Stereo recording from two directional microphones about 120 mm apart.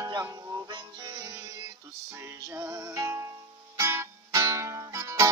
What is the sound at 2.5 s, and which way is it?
Music, 30° right (ahead or behind).